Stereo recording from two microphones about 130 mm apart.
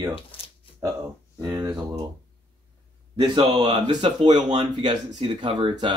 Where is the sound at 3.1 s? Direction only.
35° right (ahead or behind).